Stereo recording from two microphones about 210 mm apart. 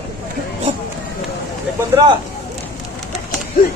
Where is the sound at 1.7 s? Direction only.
15° right (ahead or behind).